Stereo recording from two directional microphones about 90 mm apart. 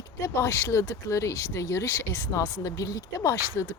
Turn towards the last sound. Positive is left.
turn(degrees=35)  # may be behind; listen again after turning